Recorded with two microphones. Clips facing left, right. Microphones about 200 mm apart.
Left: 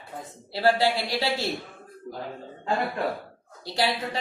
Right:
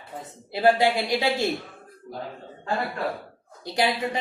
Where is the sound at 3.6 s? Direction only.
20° right (ahead or behind).